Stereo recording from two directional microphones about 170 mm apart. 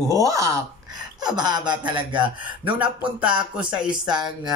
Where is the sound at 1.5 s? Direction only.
25° right (ahead or behind).